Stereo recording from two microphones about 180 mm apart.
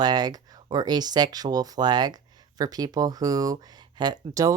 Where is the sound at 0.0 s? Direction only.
20° right (ahead or behind).